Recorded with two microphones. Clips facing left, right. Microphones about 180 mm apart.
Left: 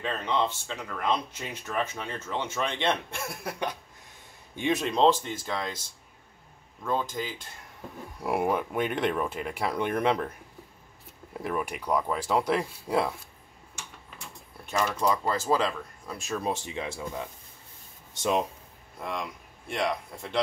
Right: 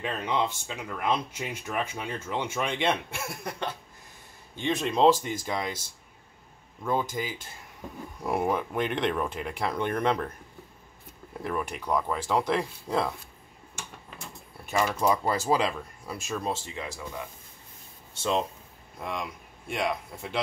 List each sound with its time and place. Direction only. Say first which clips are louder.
0.0 s speech: even; 10° right (ahead or behind)
4.6 s speech: left 1 dB; 5° left (ahead or behind)
4.9 s speech: right 3 dB; 10° right (ahead or behind)
6.8 s speech: right 1 dB; 10° right (ahead or behind)
8.2 s speech: left 1 dB; 10° left (ahead or behind)
11.4 s speech: left 1 dB; 5° left (ahead or behind)
14.7 s speech: right 1 dB; 5° right (ahead or behind)
16.2 s speech: left 1 dB; 5° left (ahead or behind)
16.5 s speech: left 3 dB; 20° left (ahead or behind)
18.9 s speech: even; centre (ahead or behind)